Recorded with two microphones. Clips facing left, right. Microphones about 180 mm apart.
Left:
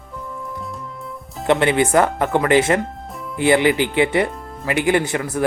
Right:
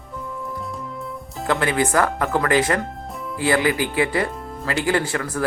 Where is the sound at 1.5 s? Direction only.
25° left (ahead or behind).